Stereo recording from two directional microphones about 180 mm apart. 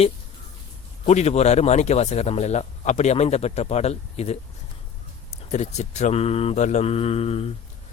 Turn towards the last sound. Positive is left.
turn(degrees=35)  # may be behind; listen again after turning